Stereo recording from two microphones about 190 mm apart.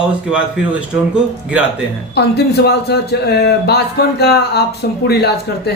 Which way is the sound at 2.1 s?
60° left (ahead or behind).